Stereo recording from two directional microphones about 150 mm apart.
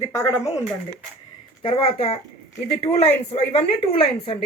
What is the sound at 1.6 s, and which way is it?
Speech, 40° left (ahead or behind).